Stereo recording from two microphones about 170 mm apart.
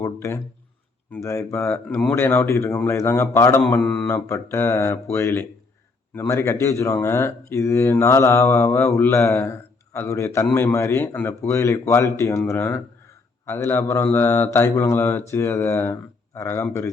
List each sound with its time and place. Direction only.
0.0 s speech: 15° left (ahead or behind)